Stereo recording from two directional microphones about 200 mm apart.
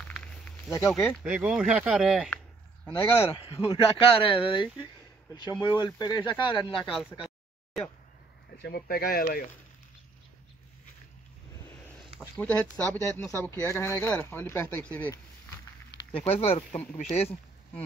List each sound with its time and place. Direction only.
0.0 s snake: 5° left (ahead or behind)
0.7 s speech: 15° left (ahead or behind)
1.1 s speech: 5° right (ahead or behind); by 3.8 s 15° left (ahead or behind)
3.8 s speech: 25° left (ahead or behind)
8.6 s speech: 50° left (ahead or behind)
12.2 s speech: 5° left (ahead or behind)
16.3 s speech: 30° left (ahead or behind)